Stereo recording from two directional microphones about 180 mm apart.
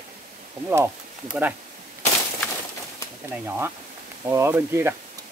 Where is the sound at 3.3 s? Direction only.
10° right (ahead or behind).